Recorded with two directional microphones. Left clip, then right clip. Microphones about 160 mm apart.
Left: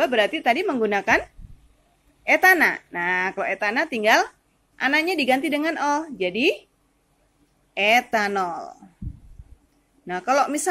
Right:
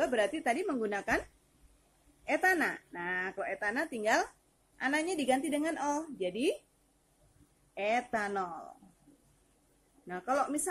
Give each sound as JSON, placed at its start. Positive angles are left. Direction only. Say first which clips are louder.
{"t": 0.0, "sound": "speech", "louder": "left 10 dB", "side_deg": 15}
{"t": 2.2, "sound": "speech", "louder": "left 13 dB", "side_deg": 30}
{"t": 7.7, "sound": "speech", "louder": "left 13 dB", "side_deg": 25}
{"t": 10.0, "sound": "speech", "louder": "left 11 dB", "side_deg": 25}